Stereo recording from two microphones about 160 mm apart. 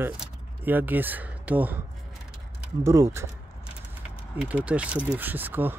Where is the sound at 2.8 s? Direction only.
20° right (ahead or behind).